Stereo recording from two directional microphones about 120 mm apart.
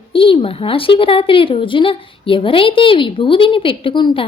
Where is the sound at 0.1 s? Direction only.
50° left (ahead or behind).